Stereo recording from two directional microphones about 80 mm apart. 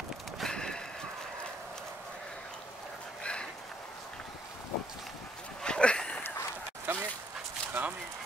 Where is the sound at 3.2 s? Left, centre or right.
Centre.